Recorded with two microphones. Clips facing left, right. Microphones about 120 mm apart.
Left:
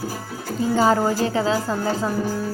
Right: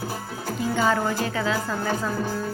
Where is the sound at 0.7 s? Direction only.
35° left (ahead or behind).